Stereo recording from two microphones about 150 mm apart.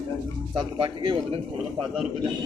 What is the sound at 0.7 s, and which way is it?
Speech, 35° right (ahead or behind).